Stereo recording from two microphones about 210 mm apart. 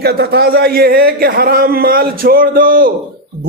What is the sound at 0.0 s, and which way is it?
A man's voice, 50° right (ahead or behind).